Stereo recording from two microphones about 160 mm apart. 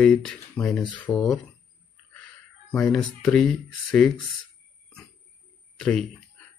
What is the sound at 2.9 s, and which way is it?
Speech, 5° left (ahead or behind).